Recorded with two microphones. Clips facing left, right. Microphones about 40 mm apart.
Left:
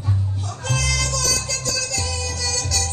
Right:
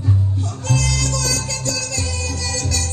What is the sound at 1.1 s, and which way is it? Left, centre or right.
Music, right.